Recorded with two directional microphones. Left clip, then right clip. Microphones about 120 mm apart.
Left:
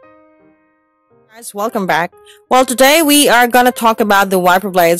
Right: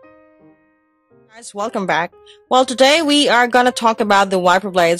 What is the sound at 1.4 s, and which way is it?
Speech, 45° left (ahead or behind).